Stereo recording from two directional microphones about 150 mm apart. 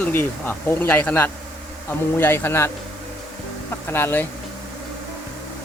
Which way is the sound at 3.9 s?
15° left (ahead or behind).